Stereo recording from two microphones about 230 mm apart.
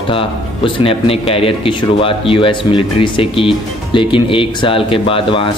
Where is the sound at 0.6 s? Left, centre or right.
Left.